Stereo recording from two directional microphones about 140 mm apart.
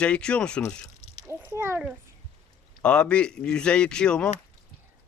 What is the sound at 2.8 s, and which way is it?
Speech, 5° left (ahead or behind).